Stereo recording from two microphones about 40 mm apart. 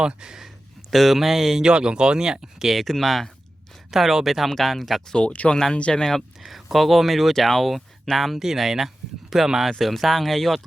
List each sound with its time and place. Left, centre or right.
0.0 s speech: right
0.9 s speech: centre
1.6 s speech: right
2.7 s speech: centre
3.9 s speech: centre
4.4 s speech: centre
5.1 s speech: left
5.5 s speech: centre
5.7 s speech: left
6.0 s speech: centre
6.4 s speech: centre